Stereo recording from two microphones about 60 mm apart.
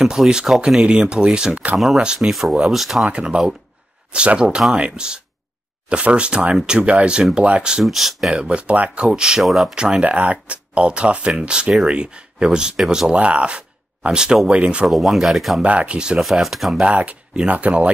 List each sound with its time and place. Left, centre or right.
0.0 s speech: centre
1.8 s speech: centre
3.1 s speech: centre
7.8 s speech: centre
8.4 s speech: centre
9.4 s speech: centre
9.8 s speech: centre
14.9 s speech: centre
15.6 s speech: right
16.2 s speech: centre
16.8 s speech: centre